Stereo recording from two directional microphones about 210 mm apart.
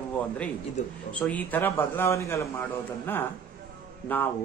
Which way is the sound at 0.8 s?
35° left (ahead or behind).